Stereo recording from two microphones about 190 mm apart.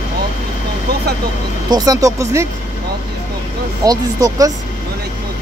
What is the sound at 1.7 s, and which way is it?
Speech, 20° right (ahead or behind).